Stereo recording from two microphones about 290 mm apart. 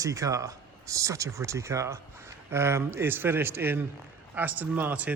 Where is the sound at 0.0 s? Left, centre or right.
Centre.